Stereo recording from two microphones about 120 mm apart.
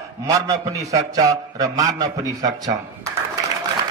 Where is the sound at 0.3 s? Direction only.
30° right (ahead or behind).